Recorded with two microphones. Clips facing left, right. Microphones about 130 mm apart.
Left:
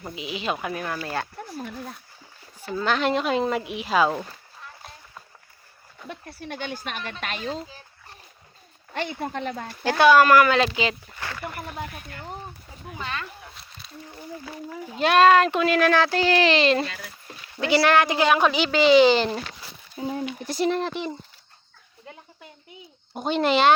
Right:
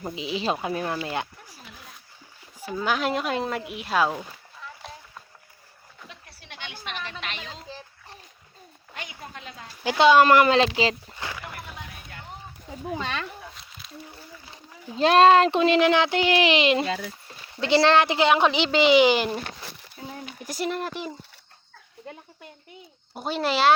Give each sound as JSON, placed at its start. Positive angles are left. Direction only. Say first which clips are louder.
{"t": 0.0, "sound": "speech", "louder": "right 2 dB", "side_deg": -25}
{"t": 1.5, "sound": "speech", "louder": "left 13 dB", "side_deg": 50}
{"t": 2.6, "sound": "speech", "louder": "left 2 dB", "side_deg": -10}
{"t": 6.1, "sound": "speech", "louder": "left 14 dB", "side_deg": 50}
{"t": 9.2, "sound": "speech", "louder": "left 11 dB", "side_deg": 60}
{"t": 10.0, "sound": "speech", "louder": "even", "side_deg": -20}
{"t": 11.1, "sound": "speech", "louder": "even", "side_deg": -15}
{"t": 12.9, "sound": "speech", "louder": "right 3 dB", "side_deg": -90}
{"t": 13.5, "sound": "a sound", "louder": "even", "side_deg": 0}
{"t": 14.9, "sound": "speech", "louder": "right 1 dB", "side_deg": -30}
{"t": 20.0, "sound": "speech", "louder": "left 10 dB", "side_deg": 20}
{"t": 20.4, "sound": "speech", "louder": "left 3 dB", "side_deg": -10}
{"t": 23.1, "sound": "speech", "louder": "left 4 dB", "side_deg": -5}